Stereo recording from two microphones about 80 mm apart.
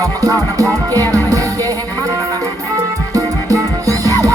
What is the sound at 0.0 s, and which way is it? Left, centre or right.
Music, right.